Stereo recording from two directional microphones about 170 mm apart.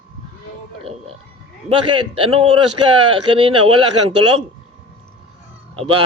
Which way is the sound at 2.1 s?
35° right (ahead or behind).